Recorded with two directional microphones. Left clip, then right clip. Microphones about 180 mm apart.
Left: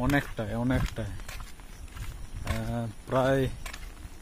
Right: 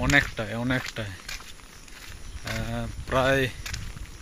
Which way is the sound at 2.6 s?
15° left (ahead or behind).